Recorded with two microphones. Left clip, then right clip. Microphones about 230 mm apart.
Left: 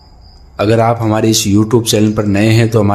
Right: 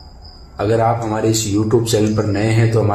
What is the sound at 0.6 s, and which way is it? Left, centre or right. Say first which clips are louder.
A man's voice: left 4 dB; left.